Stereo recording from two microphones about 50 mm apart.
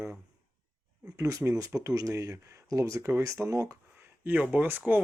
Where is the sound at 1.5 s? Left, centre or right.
Right.